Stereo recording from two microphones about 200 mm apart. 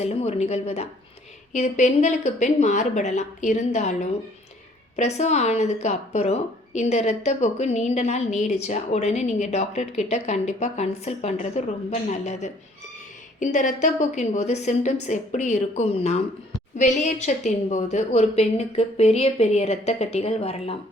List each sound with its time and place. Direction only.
0.0 s a woman's voice: 30° left (ahead or behind)
4.9 s a woman's voice: 35° left (ahead or behind)